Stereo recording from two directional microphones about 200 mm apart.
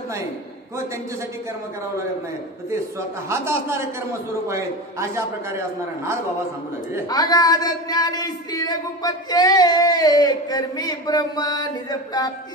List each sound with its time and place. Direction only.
3.3 s a man's voice: 15° right (ahead or behind)
7.1 s singing: 20° left (ahead or behind)